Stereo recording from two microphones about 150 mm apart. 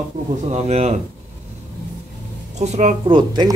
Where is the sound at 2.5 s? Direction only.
50° right (ahead or behind).